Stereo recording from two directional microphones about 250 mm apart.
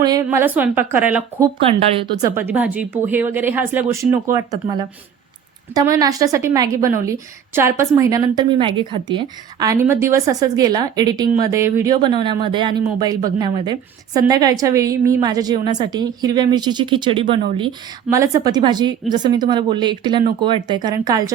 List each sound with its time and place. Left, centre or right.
0.0 s speech: centre